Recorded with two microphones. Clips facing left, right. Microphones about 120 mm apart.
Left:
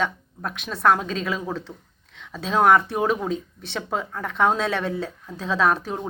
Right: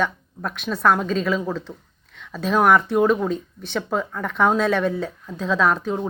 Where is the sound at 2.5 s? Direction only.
25° left (ahead or behind).